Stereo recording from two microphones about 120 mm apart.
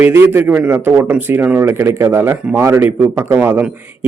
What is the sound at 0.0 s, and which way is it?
A man's voice, 20° right (ahead or behind).